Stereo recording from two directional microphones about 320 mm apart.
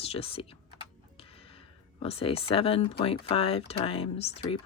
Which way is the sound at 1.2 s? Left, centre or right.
Centre.